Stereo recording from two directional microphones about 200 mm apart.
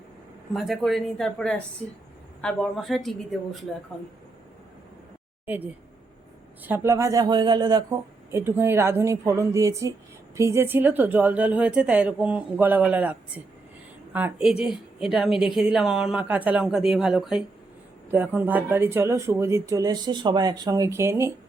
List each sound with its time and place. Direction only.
0.5 s a woman's voice: centre (ahead or behind)
6.6 s a woman's voice: 10° right (ahead or behind)